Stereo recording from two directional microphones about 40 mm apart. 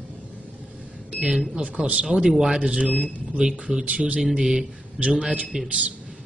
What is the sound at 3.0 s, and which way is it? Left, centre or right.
Speech, right.